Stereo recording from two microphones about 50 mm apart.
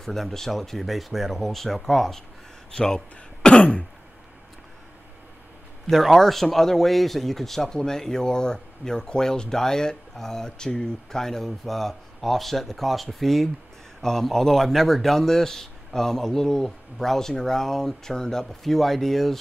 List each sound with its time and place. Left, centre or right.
0.0 s speech: centre
3.4 s throat clearing: left
5.9 s speech: centre